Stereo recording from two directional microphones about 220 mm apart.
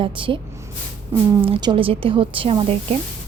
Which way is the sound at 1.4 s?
20° right (ahead or behind).